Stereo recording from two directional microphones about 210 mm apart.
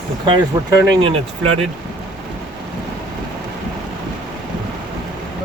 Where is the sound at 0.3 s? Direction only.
25° right (ahead or behind).